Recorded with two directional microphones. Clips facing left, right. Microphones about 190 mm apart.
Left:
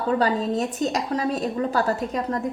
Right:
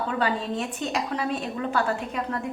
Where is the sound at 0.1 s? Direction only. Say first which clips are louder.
Left 8 dB; 40° left (ahead or behind).